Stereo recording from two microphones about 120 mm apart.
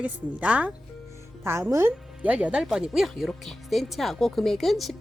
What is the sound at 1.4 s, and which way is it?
Speech, 20° right (ahead or behind).